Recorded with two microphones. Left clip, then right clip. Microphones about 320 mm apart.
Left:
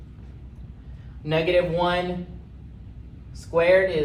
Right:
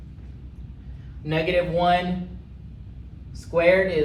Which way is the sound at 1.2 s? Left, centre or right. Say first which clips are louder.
Left 2 dB; centre.